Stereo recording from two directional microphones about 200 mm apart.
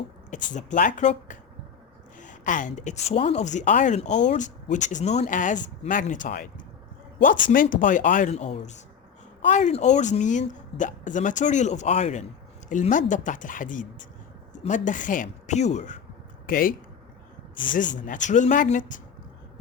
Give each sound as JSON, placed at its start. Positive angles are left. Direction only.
{"t": 0.5, "sound": "speech", "side_deg": 40}
{"t": 7.5, "sound": "speech", "side_deg": 45}
{"t": 17.5, "sound": "speech", "side_deg": 25}
{"t": 17.9, "sound": "speech", "side_deg": 40}